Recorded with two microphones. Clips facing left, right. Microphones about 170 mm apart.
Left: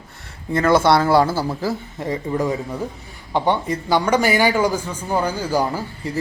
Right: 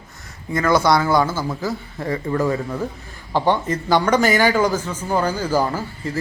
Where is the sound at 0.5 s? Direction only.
30° left (ahead or behind).